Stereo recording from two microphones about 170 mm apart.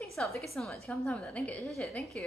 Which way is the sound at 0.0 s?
Centre (ahead or behind).